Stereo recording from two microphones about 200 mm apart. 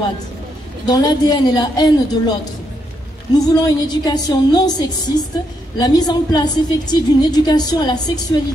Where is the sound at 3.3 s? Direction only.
20° left (ahead or behind).